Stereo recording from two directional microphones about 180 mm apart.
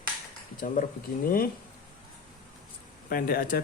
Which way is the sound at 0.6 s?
50° left (ahead or behind).